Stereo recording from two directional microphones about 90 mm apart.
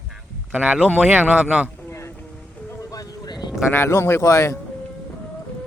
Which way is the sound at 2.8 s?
40° left (ahead or behind).